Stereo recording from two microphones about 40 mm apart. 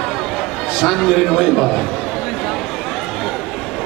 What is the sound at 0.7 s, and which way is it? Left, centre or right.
Speech, centre.